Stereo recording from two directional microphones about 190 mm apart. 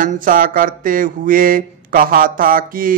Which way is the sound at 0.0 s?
45° right (ahead or behind).